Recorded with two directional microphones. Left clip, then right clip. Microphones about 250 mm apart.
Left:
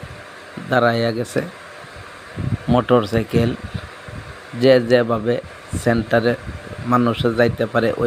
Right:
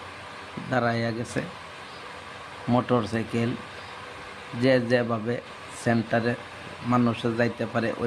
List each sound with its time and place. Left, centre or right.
0.7 s speech: centre
2.7 s speech: centre
4.6 s speech: centre